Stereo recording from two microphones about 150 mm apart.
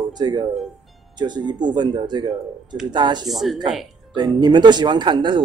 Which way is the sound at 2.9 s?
30° right (ahead or behind).